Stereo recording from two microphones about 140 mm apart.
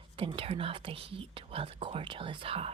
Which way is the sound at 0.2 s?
40° right (ahead or behind).